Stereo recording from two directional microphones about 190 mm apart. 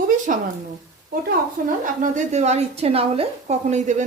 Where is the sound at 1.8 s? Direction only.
40° right (ahead or behind).